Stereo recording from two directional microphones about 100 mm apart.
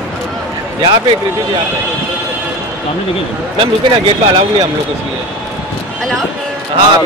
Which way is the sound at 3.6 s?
65° right (ahead or behind).